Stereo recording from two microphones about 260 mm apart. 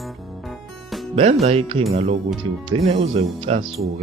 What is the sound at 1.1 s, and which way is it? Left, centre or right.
Speech, right.